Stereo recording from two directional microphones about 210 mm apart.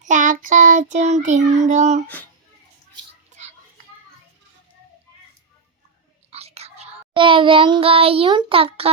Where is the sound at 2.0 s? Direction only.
10° left (ahead or behind).